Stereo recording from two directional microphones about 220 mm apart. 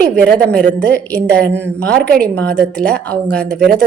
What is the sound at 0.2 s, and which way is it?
A woman's voice, 5° left (ahead or behind).